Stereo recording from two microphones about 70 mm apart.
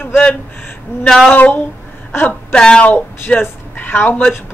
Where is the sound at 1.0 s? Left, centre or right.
Centre.